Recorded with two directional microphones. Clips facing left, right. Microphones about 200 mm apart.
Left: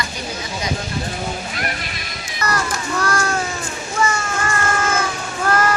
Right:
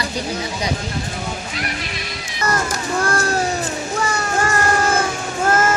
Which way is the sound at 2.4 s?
25° right (ahead or behind).